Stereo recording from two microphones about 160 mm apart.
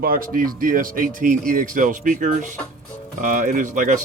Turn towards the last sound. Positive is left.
turn(degrees=-55)  # may be behind; listen again after turning